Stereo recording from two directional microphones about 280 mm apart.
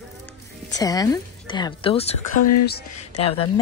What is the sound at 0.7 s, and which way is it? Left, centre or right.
Speech, centre.